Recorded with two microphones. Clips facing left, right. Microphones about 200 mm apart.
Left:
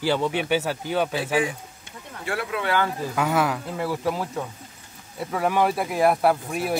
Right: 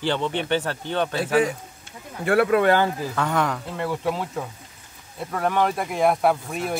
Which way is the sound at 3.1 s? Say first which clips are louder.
Left 4 dB; 5° left (ahead or behind).